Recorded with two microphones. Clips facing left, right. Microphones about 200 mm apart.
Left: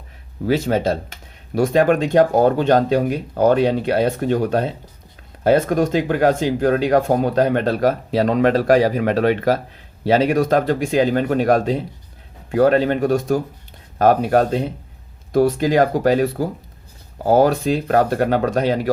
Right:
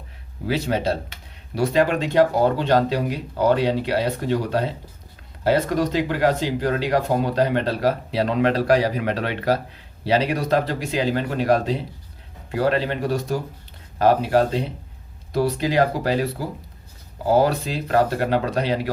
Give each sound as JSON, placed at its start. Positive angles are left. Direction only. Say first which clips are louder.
{"t": 0.4, "sound": "speech", "louder": "left 4 dB", "side_deg": 45}